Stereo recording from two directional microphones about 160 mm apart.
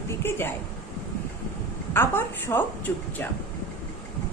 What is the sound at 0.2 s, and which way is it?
Speech, 15° left (ahead or behind).